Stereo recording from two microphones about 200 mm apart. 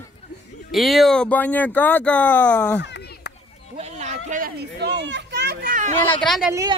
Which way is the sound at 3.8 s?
35° right (ahead or behind).